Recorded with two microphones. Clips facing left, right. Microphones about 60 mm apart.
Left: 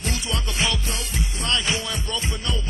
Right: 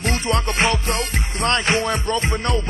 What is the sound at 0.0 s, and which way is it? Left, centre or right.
Music, right.